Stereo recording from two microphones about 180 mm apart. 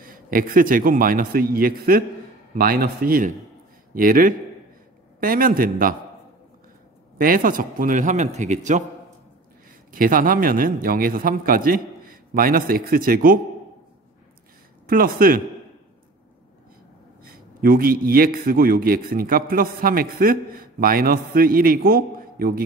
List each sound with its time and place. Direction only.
0.0 s a man's voice: 50° right (ahead or behind)
7.2 s a man's voice: 50° right (ahead or behind)
9.9 s a man's voice: 50° right (ahead or behind)
14.9 s a man's voice: 55° right (ahead or behind)
17.2 s a man's voice: 55° right (ahead or behind)